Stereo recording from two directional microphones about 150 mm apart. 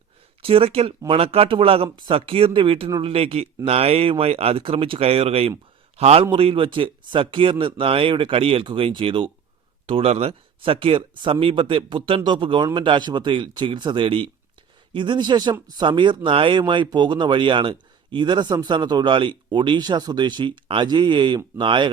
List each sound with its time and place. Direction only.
0.4 s a man's voice: 40° right (ahead or behind)